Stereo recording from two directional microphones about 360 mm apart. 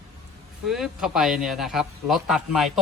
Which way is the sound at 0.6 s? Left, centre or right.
Centre.